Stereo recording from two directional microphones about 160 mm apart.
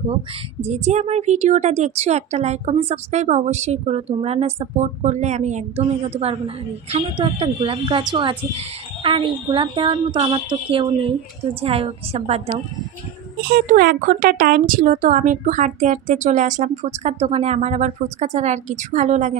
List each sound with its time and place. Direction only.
0.7 s a woman's voice: 45° right (ahead or behind)
13.5 s speech: 65° right (ahead or behind); by 19.3 s 50° right (ahead or behind)